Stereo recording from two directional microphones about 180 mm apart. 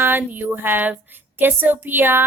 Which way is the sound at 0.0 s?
10° right (ahead or behind).